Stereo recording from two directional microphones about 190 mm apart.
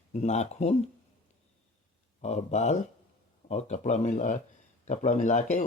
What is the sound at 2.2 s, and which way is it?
Speech, 35° left (ahead or behind).